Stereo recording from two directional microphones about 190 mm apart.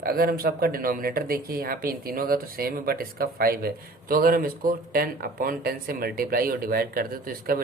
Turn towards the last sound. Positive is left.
turn(degrees=-50)  # may be behind; listen again after turning